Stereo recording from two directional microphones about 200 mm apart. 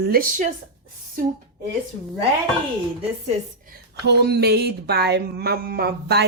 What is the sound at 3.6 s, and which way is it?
Speech, 55° right (ahead or behind).